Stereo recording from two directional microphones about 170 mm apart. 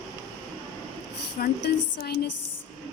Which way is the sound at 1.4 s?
70° left (ahead or behind).